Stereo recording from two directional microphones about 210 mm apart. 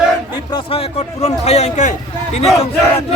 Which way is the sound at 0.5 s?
25° left (ahead or behind).